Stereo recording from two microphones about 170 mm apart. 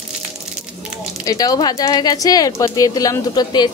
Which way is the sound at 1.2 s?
20° left (ahead or behind).